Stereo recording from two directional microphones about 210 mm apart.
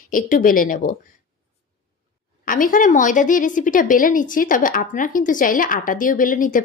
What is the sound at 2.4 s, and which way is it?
A woman's voice, 40° left (ahead or behind).